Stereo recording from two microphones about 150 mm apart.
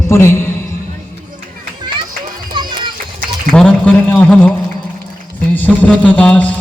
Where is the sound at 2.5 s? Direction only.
30° right (ahead or behind).